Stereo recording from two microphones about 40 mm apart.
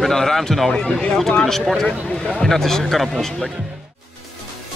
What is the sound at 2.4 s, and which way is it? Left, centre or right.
Speech, centre.